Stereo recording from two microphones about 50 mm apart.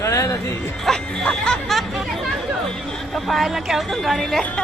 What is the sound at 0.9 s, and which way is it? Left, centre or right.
Speech, centre.